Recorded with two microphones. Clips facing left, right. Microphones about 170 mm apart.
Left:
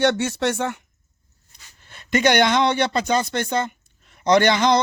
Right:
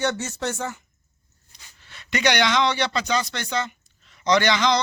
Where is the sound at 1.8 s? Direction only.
50° left (ahead or behind).